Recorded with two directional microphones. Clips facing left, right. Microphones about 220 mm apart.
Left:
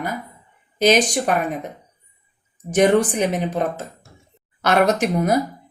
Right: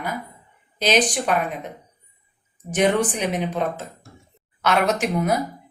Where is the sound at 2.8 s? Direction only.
45° left (ahead or behind).